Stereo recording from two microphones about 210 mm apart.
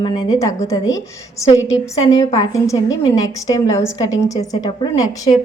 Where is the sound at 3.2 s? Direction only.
15° left (ahead or behind).